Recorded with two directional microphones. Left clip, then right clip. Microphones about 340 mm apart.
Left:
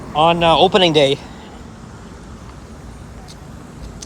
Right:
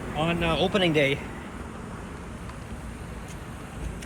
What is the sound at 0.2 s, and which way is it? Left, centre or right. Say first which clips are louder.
Speech: left 14 dB; centre.